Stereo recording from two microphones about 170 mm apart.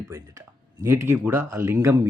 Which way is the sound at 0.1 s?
20° right (ahead or behind).